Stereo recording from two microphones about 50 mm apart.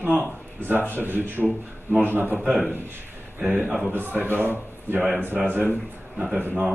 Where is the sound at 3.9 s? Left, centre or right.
Right.